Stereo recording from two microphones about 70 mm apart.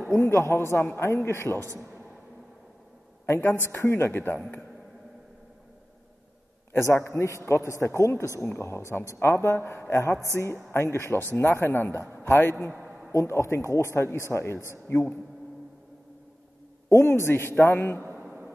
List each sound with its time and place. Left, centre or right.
0.1 s a man's voice: left
3.3 s a man's voice: left
6.7 s a man's voice: left
13.1 s a man's voice: left
16.9 s a man's voice: left
17.7 s a man's voice: left